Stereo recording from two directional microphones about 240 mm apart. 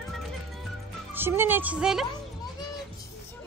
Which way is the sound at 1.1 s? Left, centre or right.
Centre.